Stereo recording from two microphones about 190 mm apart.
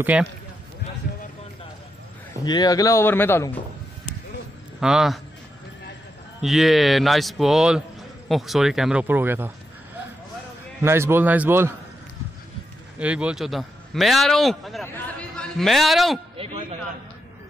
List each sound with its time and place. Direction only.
0.0 s a man's voice: 5° right (ahead or behind)
2.4 s speech: 20° left (ahead or behind)
4.7 s a man's voice: 5° right (ahead or behind)
6.4 s a man's voice: centre (ahead or behind)
10.8 s a man's voice: 15° right (ahead or behind)
13.0 s a man's voice: 5° right (ahead or behind)
16.4 s a sound: 30° right (ahead or behind)